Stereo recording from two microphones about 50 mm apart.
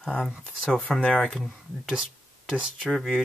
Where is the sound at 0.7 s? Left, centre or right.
Left.